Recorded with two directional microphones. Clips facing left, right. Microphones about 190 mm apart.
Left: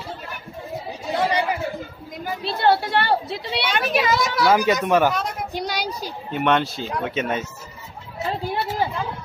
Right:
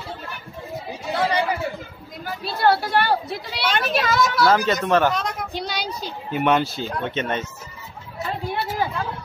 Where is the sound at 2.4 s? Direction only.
25° left (ahead or behind).